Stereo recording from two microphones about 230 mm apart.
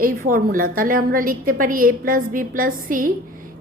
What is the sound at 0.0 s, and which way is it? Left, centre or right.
A woman's voice, right.